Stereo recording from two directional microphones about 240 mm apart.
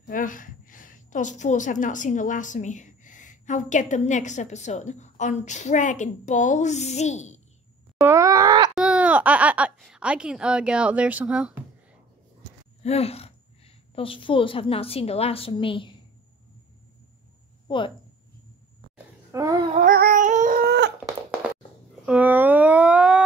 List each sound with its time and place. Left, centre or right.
0.0 s a woman's voice: left
8.0 s groan: centre
8.7 s speech: centre
12.8 s a woman's voice: left
17.6 s speech: left
19.3 s babbling: centre
19.7 s a sound: right
22.0 s a sound: centre